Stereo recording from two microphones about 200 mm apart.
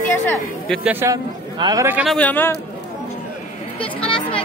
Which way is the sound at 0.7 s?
10° right (ahead or behind).